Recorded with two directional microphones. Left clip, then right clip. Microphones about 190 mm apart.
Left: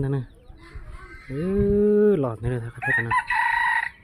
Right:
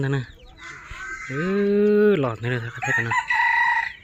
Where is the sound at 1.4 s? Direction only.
10° left (ahead or behind).